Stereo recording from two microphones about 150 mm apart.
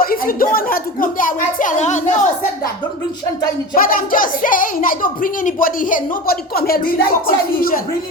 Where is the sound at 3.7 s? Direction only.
70° left (ahead or behind).